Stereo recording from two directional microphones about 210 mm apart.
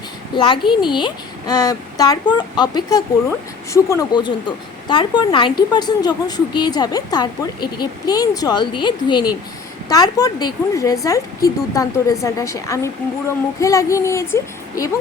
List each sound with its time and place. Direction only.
0.3 s speech: 25° left (ahead or behind)